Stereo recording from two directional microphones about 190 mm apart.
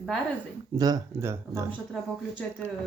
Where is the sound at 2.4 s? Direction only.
5° left (ahead or behind).